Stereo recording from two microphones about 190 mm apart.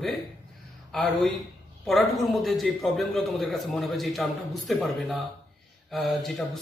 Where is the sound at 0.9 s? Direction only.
Centre (ahead or behind).